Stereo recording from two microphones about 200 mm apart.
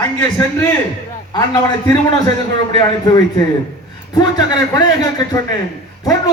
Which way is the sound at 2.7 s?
20° left (ahead or behind).